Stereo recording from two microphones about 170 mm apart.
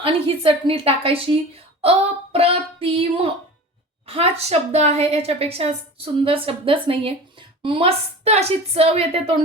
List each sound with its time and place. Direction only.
0.0 s a woman's voice: 30° right (ahead or behind)